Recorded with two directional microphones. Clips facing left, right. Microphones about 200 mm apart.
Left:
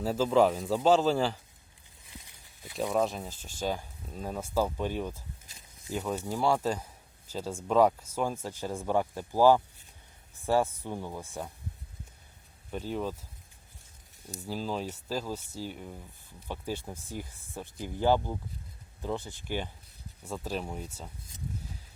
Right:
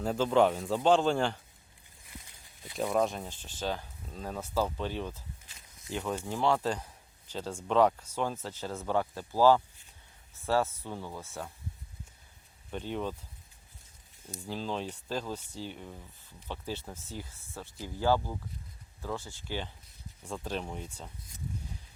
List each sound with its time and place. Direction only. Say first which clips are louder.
0.0 s a man's voice: left 1 dB; 5° left (ahead or behind)
2.6 s a man's voice: even; centre (ahead or behind)
5.5 s a sound: left 2 dB; 40° left (ahead or behind)
6.0 s a man's voice: left 1 dB; centre (ahead or behind)
12.7 s a man's voice: left 1 dB; 5° left (ahead or behind)
14.4 s speech: left 1 dB; 5° left (ahead or behind)